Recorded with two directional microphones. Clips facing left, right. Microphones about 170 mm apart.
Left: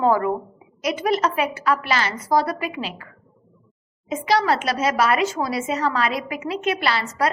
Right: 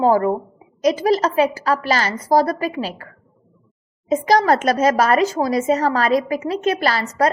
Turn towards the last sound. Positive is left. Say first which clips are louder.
# right 4 dB
turn(degrees=-40)  # may be behind; listen again after turning